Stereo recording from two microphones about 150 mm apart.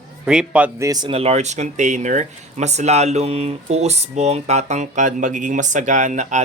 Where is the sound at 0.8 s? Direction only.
25° right (ahead or behind).